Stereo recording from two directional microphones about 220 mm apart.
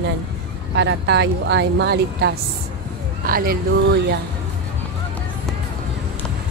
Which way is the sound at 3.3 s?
40° right (ahead or behind).